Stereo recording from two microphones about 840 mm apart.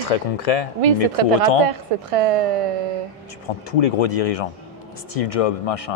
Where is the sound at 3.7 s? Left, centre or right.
Left.